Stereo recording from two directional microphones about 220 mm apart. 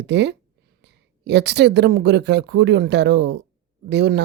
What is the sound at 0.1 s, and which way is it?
Speech, 50° right (ahead or behind).